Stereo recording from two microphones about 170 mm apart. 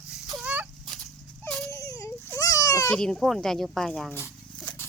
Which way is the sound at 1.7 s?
20° left (ahead or behind).